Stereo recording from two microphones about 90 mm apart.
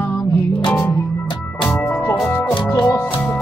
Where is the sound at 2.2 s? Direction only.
25° left (ahead or behind).